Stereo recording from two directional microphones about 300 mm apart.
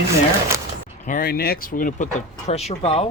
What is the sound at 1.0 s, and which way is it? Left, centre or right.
Speech, left.